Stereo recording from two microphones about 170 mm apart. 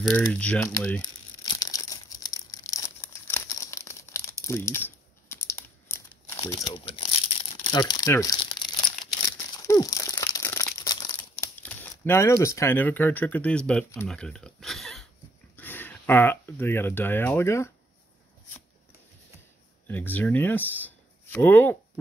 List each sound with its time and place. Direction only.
0.1 s speech: 10° left (ahead or behind)
1.0 s tearing: 20° left (ahead or behind)
5.3 s crumpling: 15° left (ahead or behind)
6.6 s crumpling: 30° left (ahead or behind)
11.5 s speech: 10° left (ahead or behind)
19.9 s speech: 10° left (ahead or behind)